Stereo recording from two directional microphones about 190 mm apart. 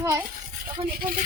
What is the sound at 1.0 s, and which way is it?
Speech, 50° right (ahead or behind).